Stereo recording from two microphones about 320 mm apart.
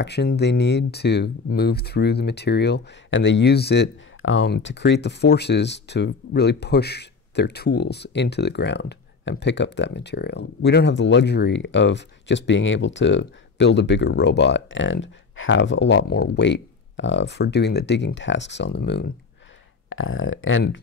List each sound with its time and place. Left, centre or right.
0.0 s speech: left